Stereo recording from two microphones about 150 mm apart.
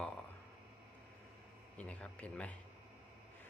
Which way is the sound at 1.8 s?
10° left (ahead or behind).